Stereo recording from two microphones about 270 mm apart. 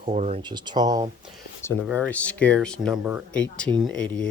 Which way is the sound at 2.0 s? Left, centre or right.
Centre.